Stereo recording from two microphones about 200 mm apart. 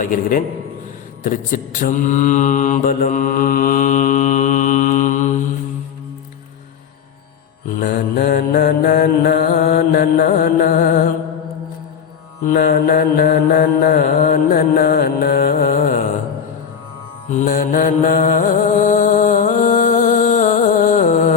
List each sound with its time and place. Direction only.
0.0 s mantra: 40° left (ahead or behind)
7.8 s mantra: 45° left (ahead or behind)
12.5 s mantra: 45° left (ahead or behind)
17.3 s mantra: 40° left (ahead or behind)